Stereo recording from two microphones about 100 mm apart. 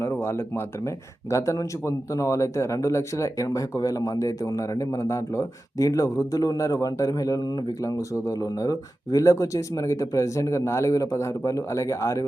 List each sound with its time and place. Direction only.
0.0 s a man's voice: 25° left (ahead or behind)